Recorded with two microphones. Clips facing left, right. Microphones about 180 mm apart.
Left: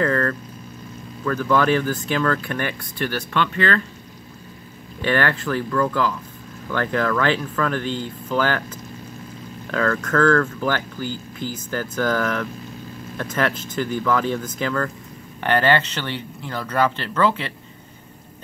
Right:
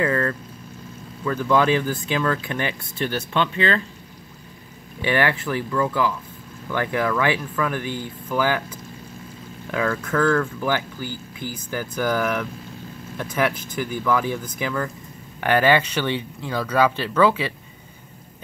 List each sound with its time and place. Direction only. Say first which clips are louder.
0.0 s speech: left 1 dB; 15° right (ahead or behind)
5.0 s speech: even; 15° right (ahead or behind)
9.7 s speech: left 2 dB; 10° right (ahead or behind)